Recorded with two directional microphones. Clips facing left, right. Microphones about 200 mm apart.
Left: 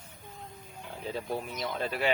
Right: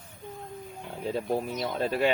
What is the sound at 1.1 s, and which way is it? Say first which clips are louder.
Speech: right 6 dB; 35° right (ahead or behind).